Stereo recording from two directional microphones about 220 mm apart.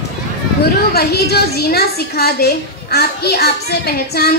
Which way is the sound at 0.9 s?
45° left (ahead or behind).